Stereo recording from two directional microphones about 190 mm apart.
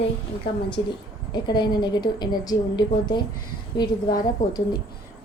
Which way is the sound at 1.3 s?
25° left (ahead or behind).